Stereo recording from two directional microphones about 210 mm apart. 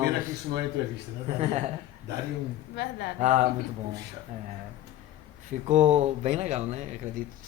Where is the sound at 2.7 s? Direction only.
50° left (ahead or behind).